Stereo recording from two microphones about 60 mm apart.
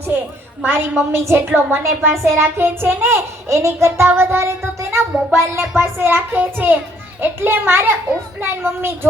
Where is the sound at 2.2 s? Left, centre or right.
Right.